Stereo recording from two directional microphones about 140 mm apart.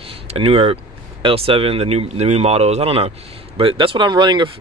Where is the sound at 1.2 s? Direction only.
40° right (ahead or behind).